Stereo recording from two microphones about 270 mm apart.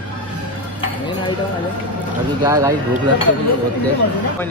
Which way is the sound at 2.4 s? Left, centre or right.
Centre.